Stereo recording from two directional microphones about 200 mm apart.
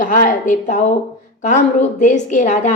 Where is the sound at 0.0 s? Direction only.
40° left (ahead or behind).